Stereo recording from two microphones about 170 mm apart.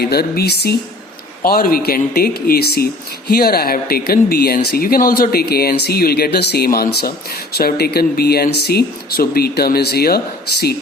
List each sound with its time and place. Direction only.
0.0 s speech: 65° left (ahead or behind)
1.4 s speech: 60° left (ahead or behind)